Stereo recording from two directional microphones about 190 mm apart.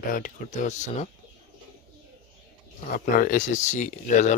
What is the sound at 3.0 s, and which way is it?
Speech, 45° left (ahead or behind).